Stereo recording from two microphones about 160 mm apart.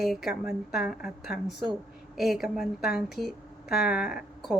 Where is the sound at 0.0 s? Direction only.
Centre (ahead or behind).